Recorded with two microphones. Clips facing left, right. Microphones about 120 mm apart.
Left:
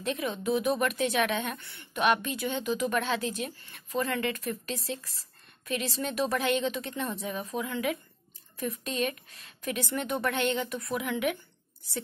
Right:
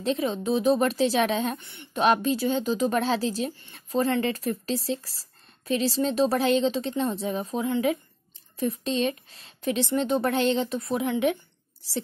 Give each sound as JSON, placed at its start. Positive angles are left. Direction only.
{"t": 0.0, "sound": "speech", "side_deg": -30}
{"t": 2.0, "sound": "speech", "side_deg": -35}